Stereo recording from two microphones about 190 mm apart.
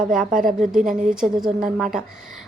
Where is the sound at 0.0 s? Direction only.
5° right (ahead or behind).